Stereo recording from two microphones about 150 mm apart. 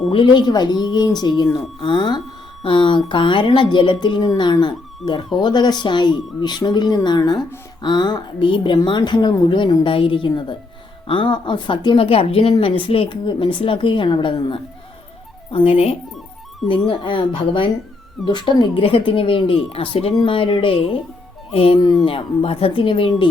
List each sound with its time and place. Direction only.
0.1 s a woman's voice: 35° left (ahead or behind)
21.8 s speech: 30° left (ahead or behind)